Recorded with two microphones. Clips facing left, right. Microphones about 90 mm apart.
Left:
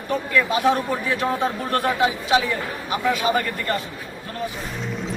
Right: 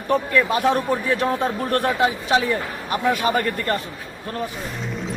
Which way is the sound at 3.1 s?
55° right (ahead or behind).